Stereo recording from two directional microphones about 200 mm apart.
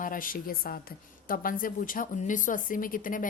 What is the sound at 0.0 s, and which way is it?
Speech, 45° left (ahead or behind).